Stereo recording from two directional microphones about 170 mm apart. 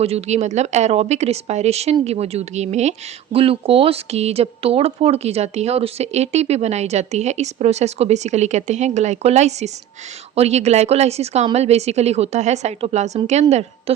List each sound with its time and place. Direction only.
0.0 s a woman's voice: 40° right (ahead or behind)